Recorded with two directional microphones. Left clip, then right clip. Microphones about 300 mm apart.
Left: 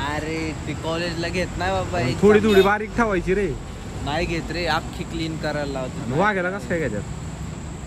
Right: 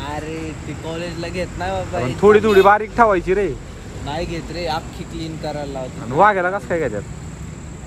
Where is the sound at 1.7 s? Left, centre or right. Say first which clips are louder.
Right 1 dB; centre.